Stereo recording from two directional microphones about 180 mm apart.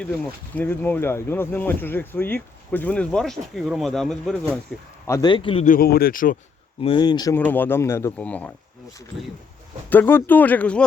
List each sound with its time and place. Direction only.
0.5 s speech: 10° left (ahead or behind)
5.0 s speech: 20° left (ahead or behind)
5.6 s speech: 55° left (ahead or behind)
6.8 s speech: 25° left (ahead or behind)
7.3 s speech: 10° left (ahead or behind)
9.9 s speech: 10° left (ahead or behind)